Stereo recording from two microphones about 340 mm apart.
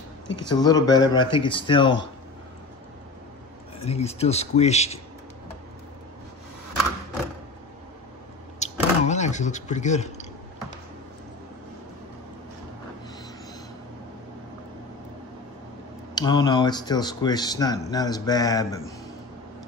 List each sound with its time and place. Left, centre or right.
0.5 s speech: centre
3.8 s speech: centre
8.5 s a sound: centre
16.2 s speech: centre